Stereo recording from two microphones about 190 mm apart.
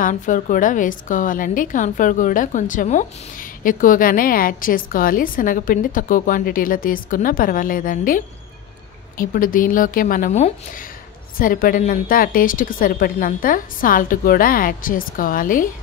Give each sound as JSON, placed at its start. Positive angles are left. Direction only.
{"t": 0.0, "sound": "a woman's voice", "side_deg": 40}
{"t": 9.2, "sound": "a woman's voice", "side_deg": 45}